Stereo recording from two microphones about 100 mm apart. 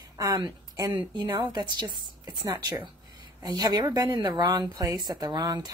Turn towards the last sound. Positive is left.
turn(degrees=-40)  # may be behind; listen again after turning